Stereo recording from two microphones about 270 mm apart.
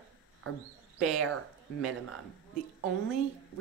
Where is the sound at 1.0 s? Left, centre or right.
Centre.